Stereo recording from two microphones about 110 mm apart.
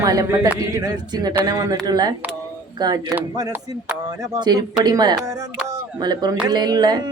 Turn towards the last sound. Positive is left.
turn(degrees=-40)  # may be behind; listen again after turning